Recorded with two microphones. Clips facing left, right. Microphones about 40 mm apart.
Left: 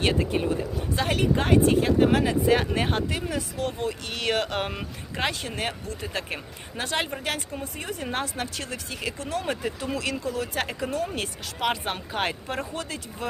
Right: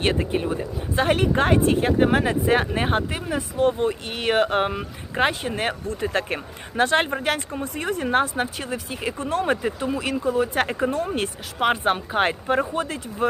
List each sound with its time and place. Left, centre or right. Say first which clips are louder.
1.0 s speech: right 5 dB; right
2.1 s speech: right 2 dB; right
2.5 s speech: right 3 dB; right
5.5 s a woman's voice: right 5 dB; right
8.1 s speech: right 9 dB; right
8.5 s speech: right 4 dB; centre
10.5 s speech: right 6 dB; right